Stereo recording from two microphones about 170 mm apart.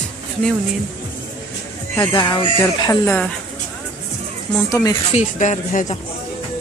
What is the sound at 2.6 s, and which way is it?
Speech, 15° left (ahead or behind).